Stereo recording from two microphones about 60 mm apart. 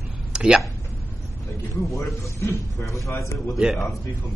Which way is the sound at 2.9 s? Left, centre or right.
Left.